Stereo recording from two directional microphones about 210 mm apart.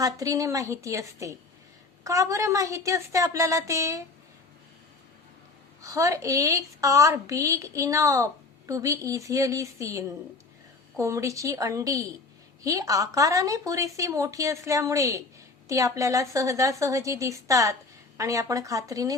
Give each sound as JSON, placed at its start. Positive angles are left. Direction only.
{"t": 0.0, "sound": "a woman's voice", "side_deg": -15}
{"t": 5.8, "sound": "a woman's voice", "side_deg": -15}